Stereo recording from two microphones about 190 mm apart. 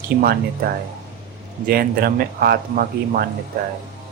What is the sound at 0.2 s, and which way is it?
Speech, 50° right (ahead or behind).